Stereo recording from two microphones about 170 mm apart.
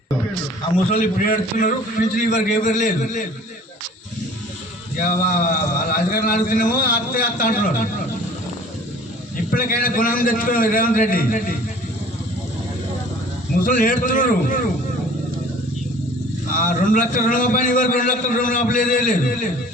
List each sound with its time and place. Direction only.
0.9 s a man's voice: 55° left (ahead or behind)
4.9 s a man's voice: 50° left (ahead or behind)
9.5 s a man's voice: 55° left (ahead or behind)
13.7 s a man's voice: 55° left (ahead or behind)
16.5 s a man's voice: 50° left (ahead or behind)